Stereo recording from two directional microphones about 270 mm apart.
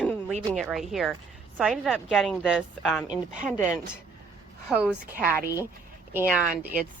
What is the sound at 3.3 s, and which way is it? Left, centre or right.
Speech, right.